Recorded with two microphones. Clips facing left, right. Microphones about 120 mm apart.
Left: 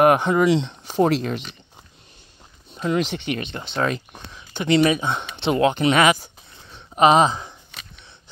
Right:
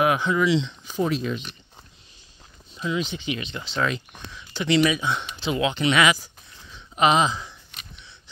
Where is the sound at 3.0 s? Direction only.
75° left (ahead or behind); by 3.8 s 55° left (ahead or behind).